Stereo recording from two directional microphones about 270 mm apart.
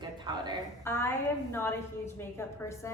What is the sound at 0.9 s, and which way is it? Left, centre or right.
A woman's voice, centre.